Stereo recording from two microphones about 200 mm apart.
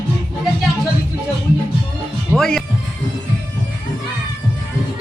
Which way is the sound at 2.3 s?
Centre (ahead or behind).